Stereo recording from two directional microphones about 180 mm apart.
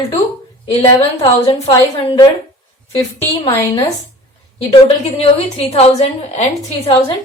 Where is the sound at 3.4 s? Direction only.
20° left (ahead or behind).